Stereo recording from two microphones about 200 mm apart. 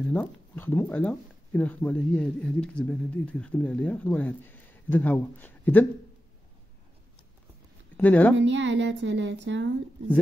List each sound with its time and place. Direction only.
0.0 s speech: 5° left (ahead or behind)
8.0 s speech: 10° left (ahead or behind)
8.4 s speech: 60° right (ahead or behind)